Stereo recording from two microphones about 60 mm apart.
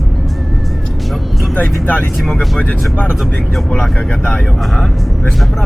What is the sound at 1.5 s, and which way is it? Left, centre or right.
Speech, left.